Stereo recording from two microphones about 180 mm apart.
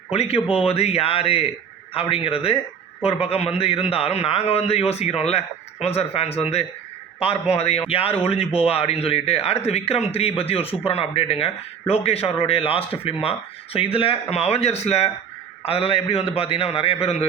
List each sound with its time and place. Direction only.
0.1 s speech: 35° left (ahead or behind)